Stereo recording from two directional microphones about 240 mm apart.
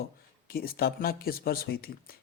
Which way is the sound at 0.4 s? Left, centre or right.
Left.